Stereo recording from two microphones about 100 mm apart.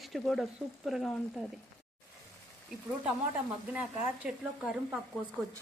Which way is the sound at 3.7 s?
15° right (ahead or behind).